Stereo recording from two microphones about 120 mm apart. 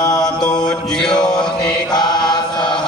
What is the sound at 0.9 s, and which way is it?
Mantra, 5° left (ahead or behind).